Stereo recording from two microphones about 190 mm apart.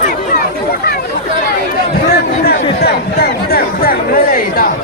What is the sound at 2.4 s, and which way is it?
Speech, 55° left (ahead or behind).